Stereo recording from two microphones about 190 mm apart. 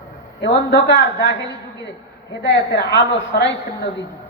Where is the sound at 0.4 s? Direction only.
65° left (ahead or behind).